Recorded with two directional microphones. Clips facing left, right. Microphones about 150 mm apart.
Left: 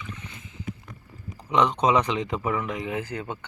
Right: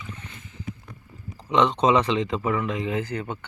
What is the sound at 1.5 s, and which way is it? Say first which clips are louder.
Speech: right 2 dB; 10° left (ahead or behind).